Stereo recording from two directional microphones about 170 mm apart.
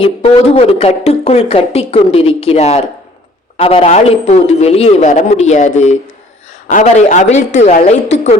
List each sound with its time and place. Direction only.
0.0 s a woman's voice: 35° left (ahead or behind)